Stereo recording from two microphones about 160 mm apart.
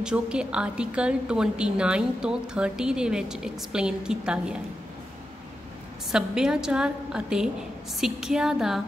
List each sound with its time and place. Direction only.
0.0 s a woman's voice: 5° right (ahead or behind)
6.1 s a woman's voice: 5° right (ahead or behind)